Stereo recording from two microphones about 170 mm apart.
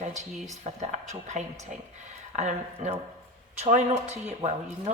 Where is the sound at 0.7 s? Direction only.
40° right (ahead or behind).